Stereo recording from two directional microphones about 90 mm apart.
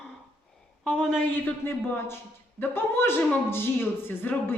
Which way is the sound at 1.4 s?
20° left (ahead or behind).